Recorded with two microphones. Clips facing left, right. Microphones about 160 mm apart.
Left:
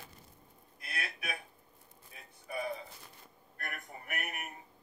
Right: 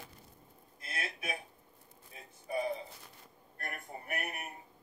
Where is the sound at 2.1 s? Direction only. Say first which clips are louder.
Right 4 dB; 25° right (ahead or behind).